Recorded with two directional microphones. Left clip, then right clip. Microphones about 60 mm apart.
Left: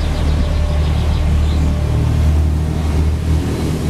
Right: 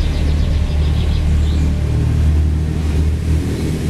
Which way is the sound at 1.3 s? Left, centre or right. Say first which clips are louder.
Left 1 dB; left.